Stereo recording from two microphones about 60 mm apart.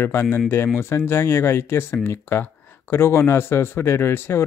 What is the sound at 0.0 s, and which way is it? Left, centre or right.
Speech, left.